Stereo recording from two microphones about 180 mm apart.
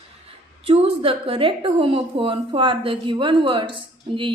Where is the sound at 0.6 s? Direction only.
30° right (ahead or behind).